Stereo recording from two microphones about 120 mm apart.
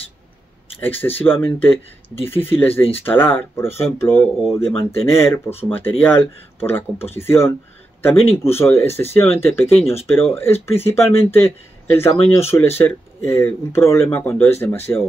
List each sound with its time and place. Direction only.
0.7 s speech: 15° left (ahead or behind)